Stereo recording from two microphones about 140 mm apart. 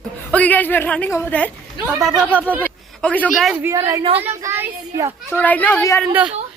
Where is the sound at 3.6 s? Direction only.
20° right (ahead or behind).